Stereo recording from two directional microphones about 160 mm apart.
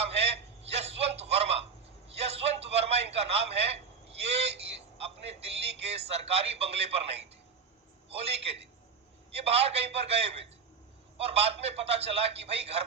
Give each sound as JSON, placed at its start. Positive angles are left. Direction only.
{"t": 0.1, "sound": "telephone", "side_deg": -40}
{"t": 2.1, "sound": "a sound", "side_deg": -40}
{"t": 5.8, "sound": "a man's voice", "side_deg": -40}
{"t": 8.2, "sound": "a man's voice", "side_deg": -40}